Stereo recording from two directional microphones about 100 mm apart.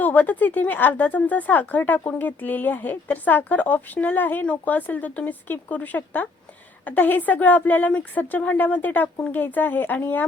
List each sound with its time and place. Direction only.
0.0 s speech: 15° left (ahead or behind)